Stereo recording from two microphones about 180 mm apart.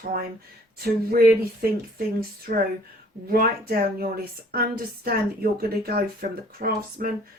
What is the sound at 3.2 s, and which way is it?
Speech, 55° right (ahead or behind).